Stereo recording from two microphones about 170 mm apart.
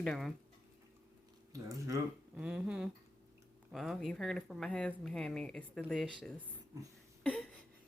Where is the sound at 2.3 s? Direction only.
5° right (ahead or behind).